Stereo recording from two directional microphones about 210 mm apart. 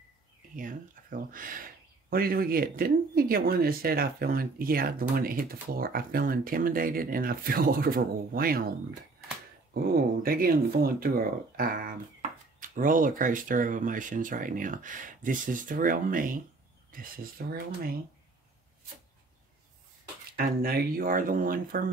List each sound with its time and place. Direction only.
0.6 s speech: 40° right (ahead or behind)
9.8 s speech: 45° right (ahead or behind)
20.3 s speech: 45° right (ahead or behind)